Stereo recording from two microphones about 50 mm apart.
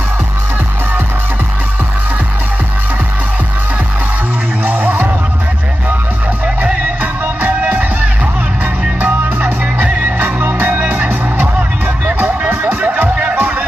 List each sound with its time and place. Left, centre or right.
4.6 s music: right
7.0 s music: right
9.0 s music: right